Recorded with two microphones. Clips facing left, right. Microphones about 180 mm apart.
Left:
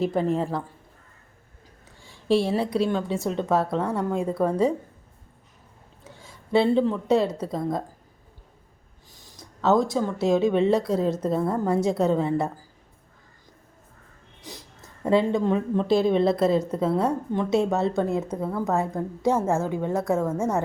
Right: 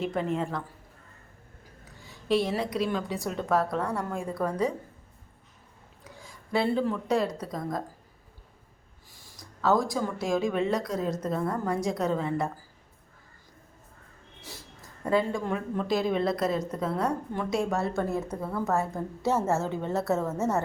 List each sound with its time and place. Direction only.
0.0 s speech: 35° left (ahead or behind)
2.0 s speech: 30° left (ahead or behind)
6.1 s speech: 25° left (ahead or behind)
9.4 s speech: 25° left (ahead or behind)
14.4 s speech: 20° left (ahead or behind)